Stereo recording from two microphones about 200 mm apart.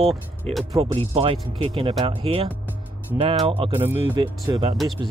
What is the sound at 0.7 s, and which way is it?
Speech, 30° right (ahead or behind).